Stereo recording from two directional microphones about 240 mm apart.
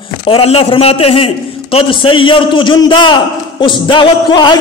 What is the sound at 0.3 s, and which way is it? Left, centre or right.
A man's voice, left.